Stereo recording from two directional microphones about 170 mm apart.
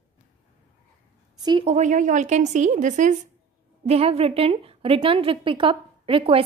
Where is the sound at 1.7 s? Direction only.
45° right (ahead or behind).